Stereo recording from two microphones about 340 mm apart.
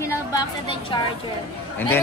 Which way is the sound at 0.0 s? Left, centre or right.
Centre.